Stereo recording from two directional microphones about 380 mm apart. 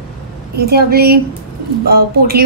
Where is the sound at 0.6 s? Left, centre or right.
Right.